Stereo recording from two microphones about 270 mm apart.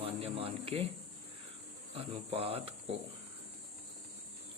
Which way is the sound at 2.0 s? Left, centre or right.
Right.